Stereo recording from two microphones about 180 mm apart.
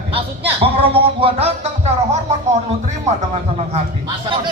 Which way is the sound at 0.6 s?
30° right (ahead or behind).